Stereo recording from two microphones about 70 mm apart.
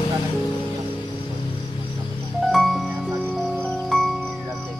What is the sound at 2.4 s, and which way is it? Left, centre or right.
Music, centre.